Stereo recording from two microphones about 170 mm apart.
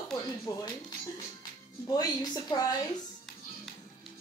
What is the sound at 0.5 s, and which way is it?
Speech, 20° left (ahead or behind).